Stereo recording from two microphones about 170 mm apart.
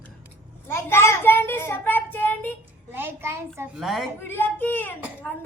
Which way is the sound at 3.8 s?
Centre (ahead or behind).